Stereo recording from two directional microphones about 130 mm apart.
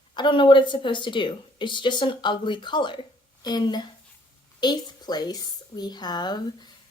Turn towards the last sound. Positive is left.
turn(degrees=30)  # may be behind; listen again after turning